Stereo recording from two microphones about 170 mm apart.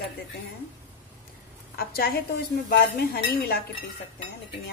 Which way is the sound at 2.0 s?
65° left (ahead or behind).